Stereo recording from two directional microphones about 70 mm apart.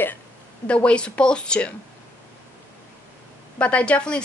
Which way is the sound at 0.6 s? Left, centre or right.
Centre.